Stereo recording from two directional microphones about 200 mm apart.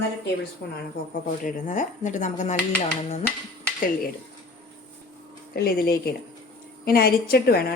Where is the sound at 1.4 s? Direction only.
40° left (ahead or behind).